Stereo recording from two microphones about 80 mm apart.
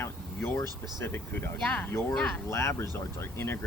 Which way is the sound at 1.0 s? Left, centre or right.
Left.